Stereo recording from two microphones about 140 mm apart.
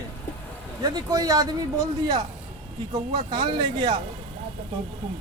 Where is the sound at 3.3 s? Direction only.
35° right (ahead or behind).